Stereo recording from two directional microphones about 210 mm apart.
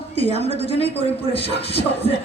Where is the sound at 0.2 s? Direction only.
30° left (ahead or behind).